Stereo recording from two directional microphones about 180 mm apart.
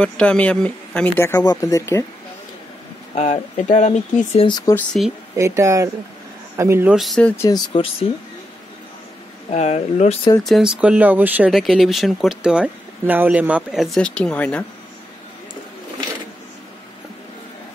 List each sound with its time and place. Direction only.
0.0 s speech: 5° left (ahead or behind)
3.2 s speech: 40° left (ahead or behind)
4.5 s speech: 25° left (ahead or behind)
4.7 s speech: centre (ahead or behind)
5.3 s speech: 15° right (ahead or behind); by 7.3 s 5° left (ahead or behind)
7.4 s speech: 25° left (ahead or behind)
9.5 s speech: 40° left (ahead or behind)
10.4 s speech: centre (ahead or behind)